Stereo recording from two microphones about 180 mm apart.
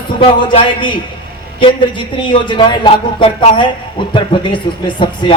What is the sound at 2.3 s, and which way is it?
A man's voice, 25° left (ahead or behind).